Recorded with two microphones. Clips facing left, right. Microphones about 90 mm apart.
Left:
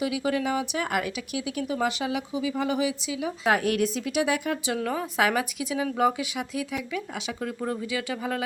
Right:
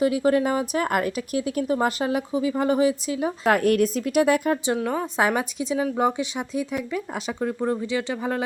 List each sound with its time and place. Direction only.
0.0 s speech: 40° right (ahead or behind)
4.9 s a woman's voice: 30° right (ahead or behind)